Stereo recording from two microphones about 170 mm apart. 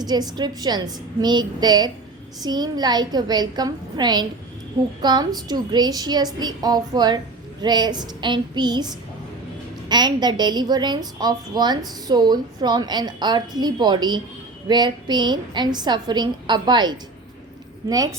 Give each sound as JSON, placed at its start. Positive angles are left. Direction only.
{"t": 0.0, "sound": "a woman's voice", "side_deg": -25}